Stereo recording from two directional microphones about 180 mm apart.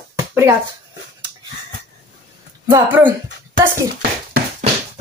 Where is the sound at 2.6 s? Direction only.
10° right (ahead or behind).